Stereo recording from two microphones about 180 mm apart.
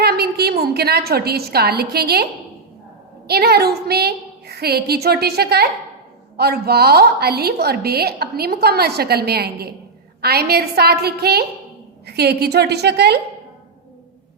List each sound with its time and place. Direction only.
0.0 s a woman's voice: 60° right (ahead or behind)
3.2 s a woman's voice: 60° right (ahead or behind)